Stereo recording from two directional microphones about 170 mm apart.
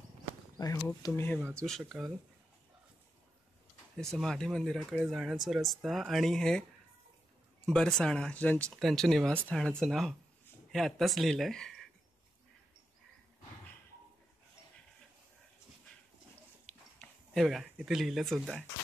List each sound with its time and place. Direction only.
0.6 s speech: 20° left (ahead or behind); by 2.1 s centre (ahead or behind)
3.9 s speech: centre (ahead or behind)
7.6 s speech: 5° left (ahead or behind)
16.6 s a sound: 5° left (ahead or behind)